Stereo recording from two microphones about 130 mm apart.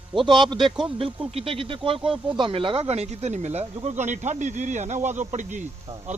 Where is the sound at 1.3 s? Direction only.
45° right (ahead or behind).